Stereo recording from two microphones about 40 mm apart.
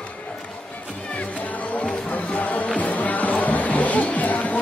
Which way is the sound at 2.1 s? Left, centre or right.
Left.